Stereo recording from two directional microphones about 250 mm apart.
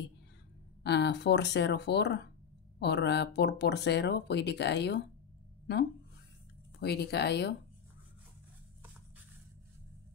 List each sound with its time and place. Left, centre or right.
0.8 s speech: left
6.8 s speech: left